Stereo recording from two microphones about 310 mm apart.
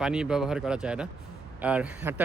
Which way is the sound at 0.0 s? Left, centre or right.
Centre.